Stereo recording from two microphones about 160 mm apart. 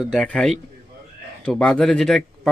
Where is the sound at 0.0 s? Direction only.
Centre (ahead or behind).